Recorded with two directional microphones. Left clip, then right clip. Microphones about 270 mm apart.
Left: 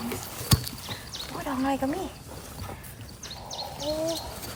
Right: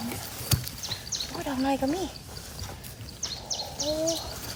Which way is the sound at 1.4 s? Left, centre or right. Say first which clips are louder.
Left 1 dB; centre.